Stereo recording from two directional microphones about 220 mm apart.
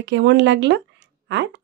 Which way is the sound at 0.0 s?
55° right (ahead or behind).